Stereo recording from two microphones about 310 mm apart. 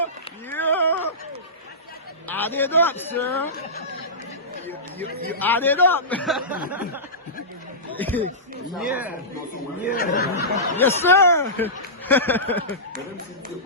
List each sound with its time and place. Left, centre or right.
0.5 s a sound: centre
2.2 s a man's voice: centre
5.4 s a man's voice: centre
7.9 s a man's voice: centre
9.8 s speech: left
10.8 s a man's voice: centre